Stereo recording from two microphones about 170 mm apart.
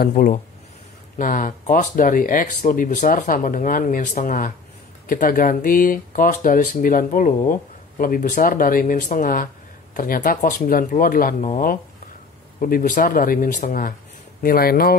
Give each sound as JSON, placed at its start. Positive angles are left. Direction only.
{"t": 0.0, "sound": "speech", "side_deg": 55}